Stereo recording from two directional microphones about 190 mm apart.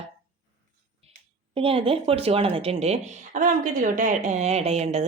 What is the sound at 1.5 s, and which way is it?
Speech, 30° right (ahead or behind).